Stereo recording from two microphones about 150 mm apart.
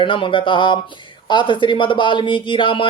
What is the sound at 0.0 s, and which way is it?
Speech, 35° left (ahead or behind).